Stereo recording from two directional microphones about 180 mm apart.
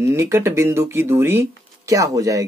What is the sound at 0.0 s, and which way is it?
Speech, 15° right (ahead or behind).